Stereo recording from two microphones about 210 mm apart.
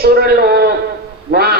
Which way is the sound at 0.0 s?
50° right (ahead or behind).